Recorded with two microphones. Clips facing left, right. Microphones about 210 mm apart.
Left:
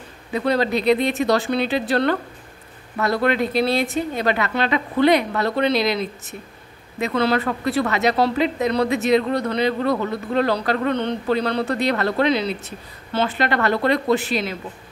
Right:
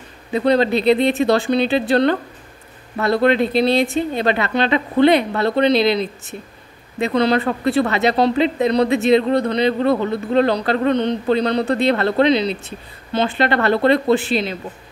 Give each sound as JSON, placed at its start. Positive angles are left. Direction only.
{"t": 0.3, "sound": "speech", "side_deg": -25}